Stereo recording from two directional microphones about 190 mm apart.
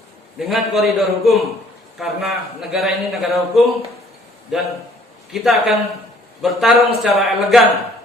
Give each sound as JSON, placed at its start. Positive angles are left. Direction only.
{"t": 0.3, "sound": "a man's voice", "side_deg": 0}